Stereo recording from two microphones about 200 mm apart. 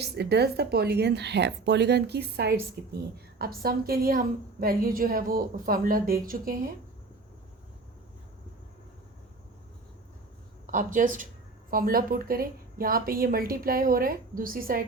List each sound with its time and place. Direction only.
0.0 s a woman's voice: 55° right (ahead or behind)
10.7 s a woman's voice: 40° right (ahead or behind)